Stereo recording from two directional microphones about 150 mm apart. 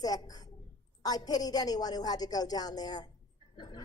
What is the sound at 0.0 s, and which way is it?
A woman's voice, 25° left (ahead or behind).